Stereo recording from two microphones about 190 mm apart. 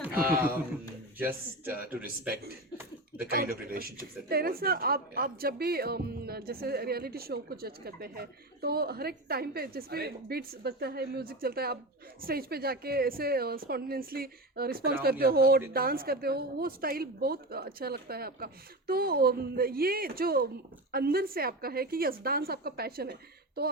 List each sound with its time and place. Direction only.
0.0 s speech: 10° right (ahead or behind)
3.2 s a woman's voice: 50° right (ahead or behind)